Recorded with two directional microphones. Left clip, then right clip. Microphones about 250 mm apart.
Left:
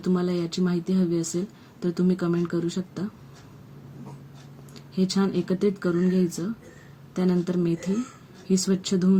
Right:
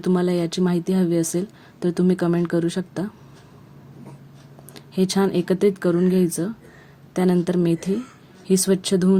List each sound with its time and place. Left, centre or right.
0.0 s speech: right
4.7 s speech: right